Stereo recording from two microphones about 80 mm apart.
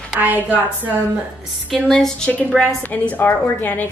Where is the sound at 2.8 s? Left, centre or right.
Left.